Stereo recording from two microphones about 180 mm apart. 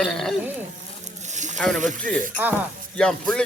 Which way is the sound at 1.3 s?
40° right (ahead or behind).